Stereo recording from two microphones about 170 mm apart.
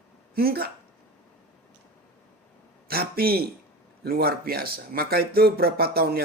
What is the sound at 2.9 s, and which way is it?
Speech, 65° right (ahead or behind).